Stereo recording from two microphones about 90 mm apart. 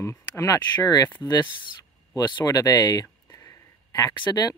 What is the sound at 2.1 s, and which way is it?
Speech, 45° left (ahead or behind).